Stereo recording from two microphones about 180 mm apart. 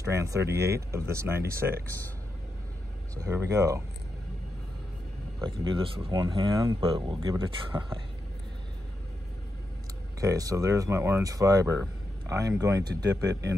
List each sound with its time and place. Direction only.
0.0 s speech: 15° right (ahead or behind)
0.5 s speech: 65° right (ahead or behind)
0.7 s speech: 15° right (ahead or behind)
3.2 s speech: 20° right (ahead or behind)
5.4 s speech: 25° right (ahead or behind)
10.2 s speech: 20° right (ahead or behind)